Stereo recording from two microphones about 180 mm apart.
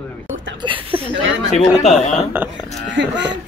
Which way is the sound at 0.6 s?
25° right (ahead or behind).